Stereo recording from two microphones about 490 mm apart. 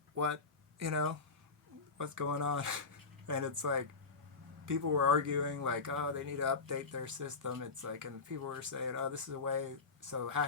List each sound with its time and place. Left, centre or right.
0.8 s speech: right